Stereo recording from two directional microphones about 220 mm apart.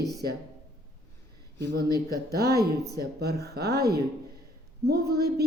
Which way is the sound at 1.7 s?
45° right (ahead or behind).